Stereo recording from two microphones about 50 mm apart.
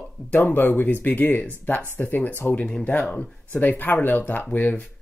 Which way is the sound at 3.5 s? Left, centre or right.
Left.